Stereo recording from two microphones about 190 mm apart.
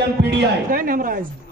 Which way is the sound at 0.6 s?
45° right (ahead or behind).